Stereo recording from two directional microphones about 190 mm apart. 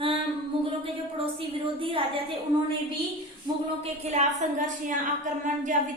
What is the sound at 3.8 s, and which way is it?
A woman's voice, 35° right (ahead or behind).